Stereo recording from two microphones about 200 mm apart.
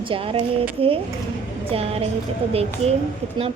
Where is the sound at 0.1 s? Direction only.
25° right (ahead or behind).